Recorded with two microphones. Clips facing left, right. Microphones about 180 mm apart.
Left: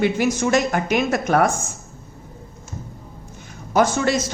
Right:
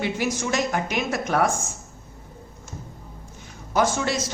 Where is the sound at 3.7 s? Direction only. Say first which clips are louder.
Left 4 dB; 55° left (ahead or behind).